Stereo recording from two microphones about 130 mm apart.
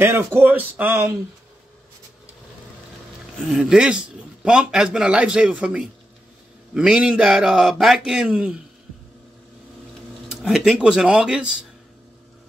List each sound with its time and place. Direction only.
0.0 s a man's voice: 15° right (ahead or behind)
3.4 s a man's voice: 5° right (ahead or behind)
10.2 s a man's voice: 5° right (ahead or behind)